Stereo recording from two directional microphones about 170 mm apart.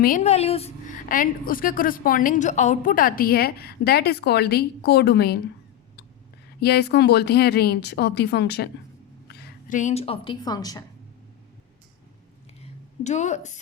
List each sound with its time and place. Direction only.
0.0 s speech: 55° left (ahead or behind)
0.3 s a woman's voice: 35° left (ahead or behind)
0.9 s a woman's voice: 50° left (ahead or behind); by 5.4 s 70° left (ahead or behind)
6.6 s a woman's voice: 75° left (ahead or behind)
9.2 s a sound: 70° left (ahead or behind)
9.6 s a woman's voice: 45° left (ahead or behind); by 10.8 s 20° left (ahead or behind)
12.6 s a sound: 40° left (ahead or behind)